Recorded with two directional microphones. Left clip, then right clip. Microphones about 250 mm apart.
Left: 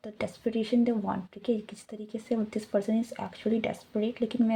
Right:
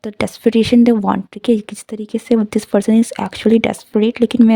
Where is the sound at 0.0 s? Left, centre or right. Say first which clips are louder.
Right 16 dB; right.